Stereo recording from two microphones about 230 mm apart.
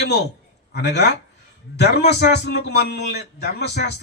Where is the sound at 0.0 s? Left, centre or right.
Left.